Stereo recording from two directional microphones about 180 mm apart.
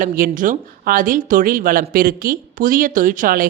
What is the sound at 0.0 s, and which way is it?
Speech, 50° right (ahead or behind).